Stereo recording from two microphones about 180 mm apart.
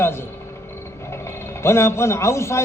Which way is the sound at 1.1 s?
15° left (ahead or behind).